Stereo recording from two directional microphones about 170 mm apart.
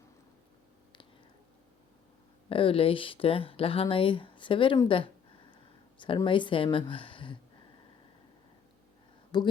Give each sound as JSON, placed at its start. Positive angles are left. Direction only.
{"t": 2.5, "sound": "speech", "side_deg": 30}
{"t": 4.9, "sound": "a sound", "side_deg": 30}
{"t": 6.2, "sound": "speech", "side_deg": 30}
{"t": 9.3, "sound": "speech", "side_deg": 25}